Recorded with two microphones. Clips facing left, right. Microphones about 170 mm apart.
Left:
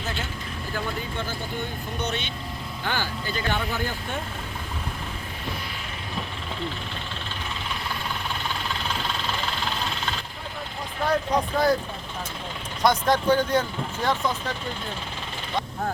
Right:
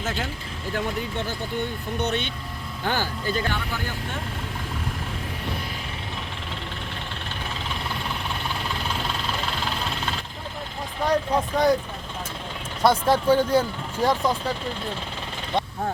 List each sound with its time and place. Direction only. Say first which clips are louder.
2.0 s speech: right 4 dB; 55° right (ahead or behind)
2.8 s speech: right 4 dB; 45° right (ahead or behind)
11.0 s speech: right 1 dB; 10° right (ahead or behind)
11.5 s speech: right 2 dB; centre (ahead or behind)
12.8 s speech: right 2 dB; 5° right (ahead or behind)